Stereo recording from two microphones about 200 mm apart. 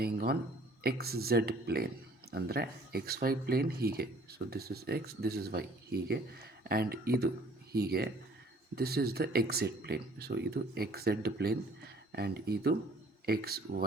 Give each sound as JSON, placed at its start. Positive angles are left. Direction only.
{"t": 0.0, "sound": "speech", "side_deg": -50}